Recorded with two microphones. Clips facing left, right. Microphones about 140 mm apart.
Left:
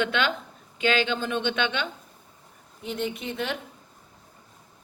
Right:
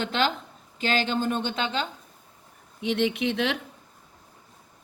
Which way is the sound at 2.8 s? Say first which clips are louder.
Right 6 dB; 75° right (ahead or behind).